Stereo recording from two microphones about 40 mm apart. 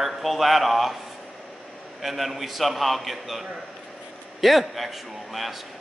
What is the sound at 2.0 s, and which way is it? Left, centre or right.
A man's voice, centre.